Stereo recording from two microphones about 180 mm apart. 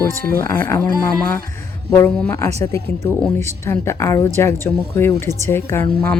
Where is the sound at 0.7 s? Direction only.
15° left (ahead or behind).